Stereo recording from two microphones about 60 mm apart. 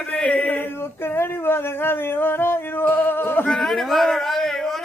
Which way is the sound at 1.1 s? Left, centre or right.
Left.